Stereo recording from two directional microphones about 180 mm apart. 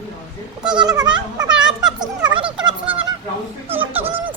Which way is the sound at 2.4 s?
5° right (ahead or behind).